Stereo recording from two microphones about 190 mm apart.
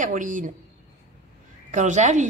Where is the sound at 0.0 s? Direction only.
45° right (ahead or behind).